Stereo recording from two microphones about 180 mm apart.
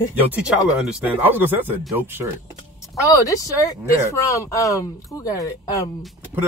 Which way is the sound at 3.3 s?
20° left (ahead or behind).